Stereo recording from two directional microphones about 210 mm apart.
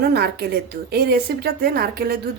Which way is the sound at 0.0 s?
50° right (ahead or behind).